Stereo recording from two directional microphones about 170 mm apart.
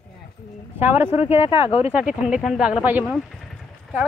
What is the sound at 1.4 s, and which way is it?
Speech, 30° left (ahead or behind).